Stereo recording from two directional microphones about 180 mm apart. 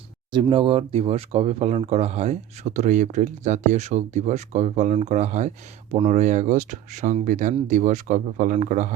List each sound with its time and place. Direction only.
0.3 s speech: 25° right (ahead or behind); by 8.9 s 40° right (ahead or behind)